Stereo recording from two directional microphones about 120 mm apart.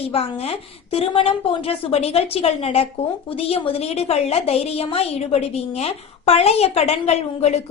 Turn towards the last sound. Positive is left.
turn(degrees=65)  # may be behind; listen again after turning